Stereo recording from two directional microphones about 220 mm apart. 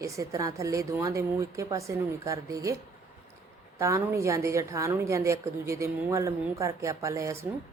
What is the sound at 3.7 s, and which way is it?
A woman's voice, 15° right (ahead or behind).